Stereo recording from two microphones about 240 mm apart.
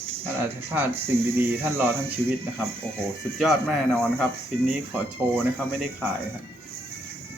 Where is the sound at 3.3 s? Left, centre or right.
Centre.